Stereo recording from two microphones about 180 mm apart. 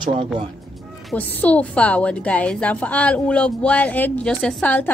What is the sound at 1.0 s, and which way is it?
A woman's voice, 10° left (ahead or behind).